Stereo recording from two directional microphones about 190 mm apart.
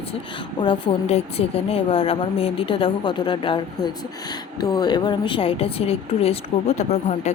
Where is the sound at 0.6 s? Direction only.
25° left (ahead or behind).